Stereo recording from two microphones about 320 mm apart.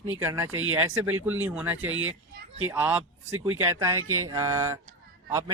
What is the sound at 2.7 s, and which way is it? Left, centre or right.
Speech, centre.